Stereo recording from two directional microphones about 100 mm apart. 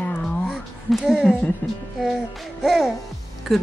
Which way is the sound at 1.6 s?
15° left (ahead or behind).